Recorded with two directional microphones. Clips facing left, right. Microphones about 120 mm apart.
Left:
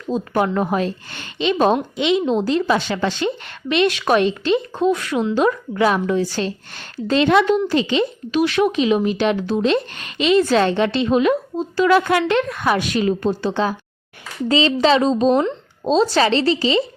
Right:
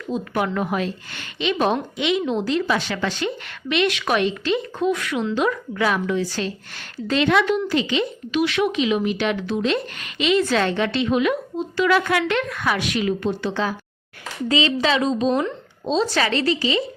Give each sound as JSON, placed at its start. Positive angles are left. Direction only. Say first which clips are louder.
{"t": 0.1, "sound": "a woman's voice", "louder": "left 4 dB", "side_deg": 35}